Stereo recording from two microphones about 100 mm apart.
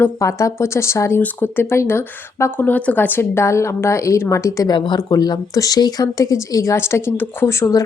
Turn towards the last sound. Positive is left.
turn(degrees=30)  # may be behind; listen again after turning